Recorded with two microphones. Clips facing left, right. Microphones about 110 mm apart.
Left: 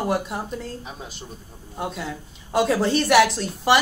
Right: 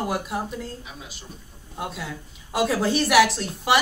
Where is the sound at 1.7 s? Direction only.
Centre (ahead or behind).